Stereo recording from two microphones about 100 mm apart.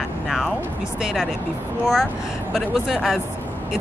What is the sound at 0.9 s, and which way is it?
Speech, 5° right (ahead or behind).